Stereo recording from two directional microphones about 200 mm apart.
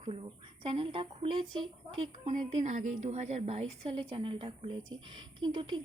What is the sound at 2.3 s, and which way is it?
A woman's voice, 35° right (ahead or behind).